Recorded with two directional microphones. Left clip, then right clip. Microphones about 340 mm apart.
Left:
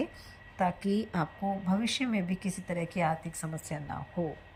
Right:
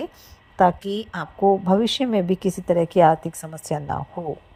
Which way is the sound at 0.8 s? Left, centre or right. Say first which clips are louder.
Right 4 dB; centre.